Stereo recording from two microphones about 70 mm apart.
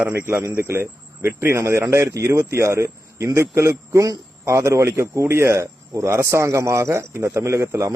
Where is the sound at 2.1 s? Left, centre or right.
Right.